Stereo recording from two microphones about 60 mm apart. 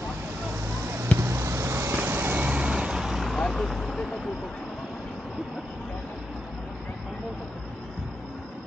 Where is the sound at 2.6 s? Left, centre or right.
Centre.